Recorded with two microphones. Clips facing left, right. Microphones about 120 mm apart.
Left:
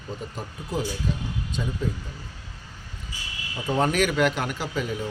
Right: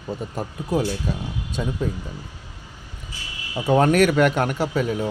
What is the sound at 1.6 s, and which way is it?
Speech, 55° right (ahead or behind).